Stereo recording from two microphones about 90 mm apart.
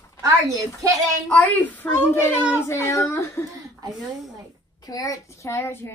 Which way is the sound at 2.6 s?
30° left (ahead or behind).